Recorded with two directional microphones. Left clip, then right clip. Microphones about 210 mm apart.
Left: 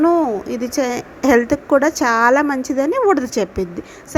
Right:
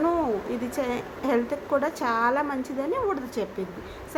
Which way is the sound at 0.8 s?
30° left (ahead or behind).